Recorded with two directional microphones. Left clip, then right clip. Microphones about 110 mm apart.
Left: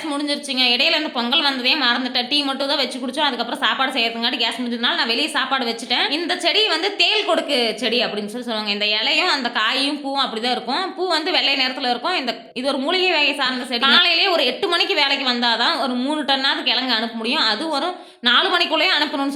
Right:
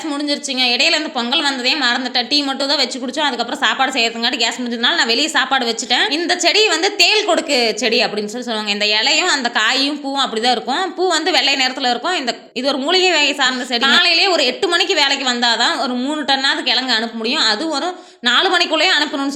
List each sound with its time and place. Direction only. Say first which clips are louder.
0.3 s a woman's voice: right 2 dB; 20° right (ahead or behind)